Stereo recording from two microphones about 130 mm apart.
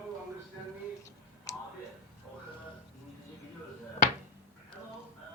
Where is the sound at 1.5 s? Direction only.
25° left (ahead or behind).